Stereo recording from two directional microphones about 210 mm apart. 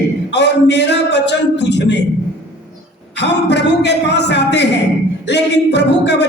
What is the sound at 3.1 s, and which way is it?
Speech, 55° left (ahead or behind).